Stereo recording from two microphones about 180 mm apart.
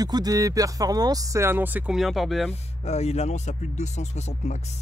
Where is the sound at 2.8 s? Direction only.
35° left (ahead or behind).